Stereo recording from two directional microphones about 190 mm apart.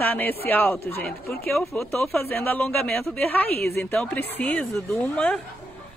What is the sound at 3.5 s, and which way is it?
Speech, 55° left (ahead or behind).